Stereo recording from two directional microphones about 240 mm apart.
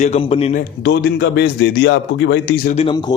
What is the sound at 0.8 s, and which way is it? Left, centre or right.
A man's voice, left.